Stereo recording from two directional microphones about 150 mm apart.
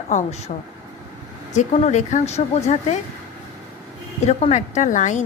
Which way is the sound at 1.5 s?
50° left (ahead or behind).